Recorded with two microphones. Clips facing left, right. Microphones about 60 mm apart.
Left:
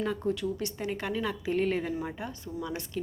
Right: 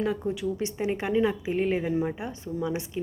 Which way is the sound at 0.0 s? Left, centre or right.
Centre.